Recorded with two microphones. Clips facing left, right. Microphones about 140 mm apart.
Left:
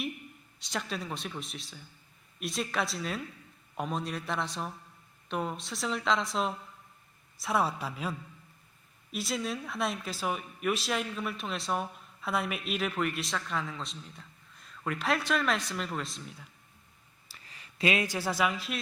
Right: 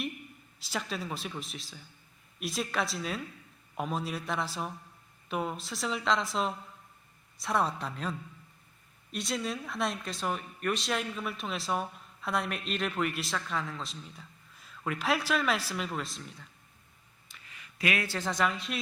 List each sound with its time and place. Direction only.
0.6 s speech: centre (ahead or behind)
9.1 s speech: centre (ahead or behind)
17.2 s speech: 35° left (ahead or behind); by 18.8 s 5° left (ahead or behind)